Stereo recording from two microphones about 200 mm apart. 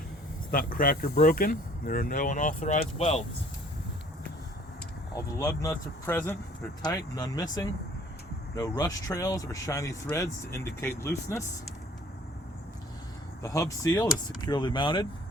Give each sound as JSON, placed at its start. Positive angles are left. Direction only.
{"t": 0.5, "sound": "speech", "side_deg": 45}
{"t": 5.1, "sound": "speech", "side_deg": 15}
{"t": 13.4, "sound": "speech", "side_deg": 15}